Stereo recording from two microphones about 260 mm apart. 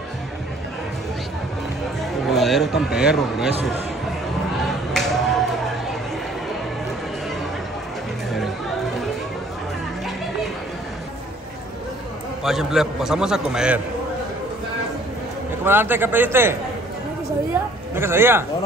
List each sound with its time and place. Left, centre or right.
2.2 s chatter: centre
3.0 s a man's voice: centre
4.6 s a sound: centre
12.4 s a man's voice: centre
15.6 s a man's voice: centre
17.9 s speech: centre